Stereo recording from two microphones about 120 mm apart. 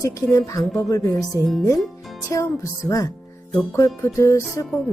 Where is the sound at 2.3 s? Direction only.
25° left (ahead or behind).